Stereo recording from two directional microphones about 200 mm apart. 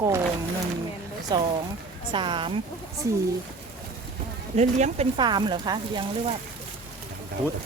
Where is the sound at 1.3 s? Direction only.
20° right (ahead or behind).